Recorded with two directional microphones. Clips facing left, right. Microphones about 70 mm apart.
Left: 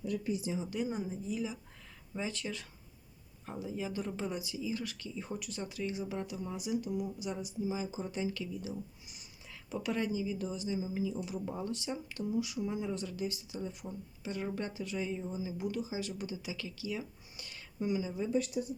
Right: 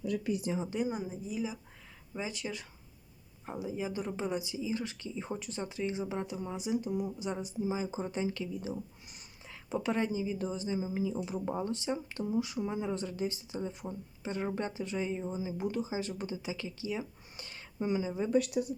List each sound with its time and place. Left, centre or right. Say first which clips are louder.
0.0 s speech: right 2 dB; right
0.6 s a woman's voice: right 2 dB; right
0.9 s speech: right 1 dB; centre; by 18.3 s right
18.3 s speech: right 5 dB; right